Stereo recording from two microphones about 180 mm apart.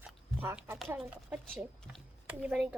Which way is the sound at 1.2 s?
5° right (ahead or behind).